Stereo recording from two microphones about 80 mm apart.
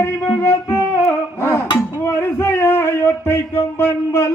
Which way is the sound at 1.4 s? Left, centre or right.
Left.